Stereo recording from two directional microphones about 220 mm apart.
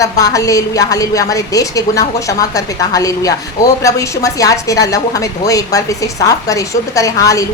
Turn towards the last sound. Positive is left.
turn(degrees=15)  # may be behind; listen again after turning